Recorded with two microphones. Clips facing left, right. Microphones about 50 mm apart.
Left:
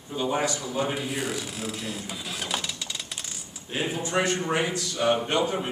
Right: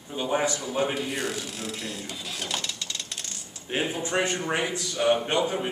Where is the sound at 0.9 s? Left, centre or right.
Centre.